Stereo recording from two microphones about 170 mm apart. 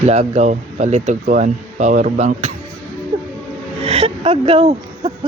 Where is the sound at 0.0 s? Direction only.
40° right (ahead or behind).